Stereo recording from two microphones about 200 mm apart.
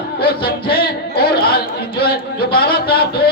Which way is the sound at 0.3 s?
50° left (ahead or behind).